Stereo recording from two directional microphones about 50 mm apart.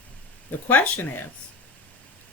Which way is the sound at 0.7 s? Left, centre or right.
Left.